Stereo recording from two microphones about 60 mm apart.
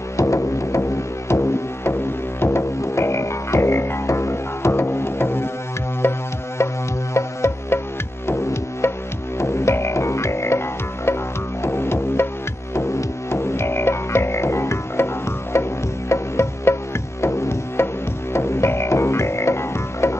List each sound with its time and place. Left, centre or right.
0.2 s music: left
11.6 s music: left
13.3 s music: left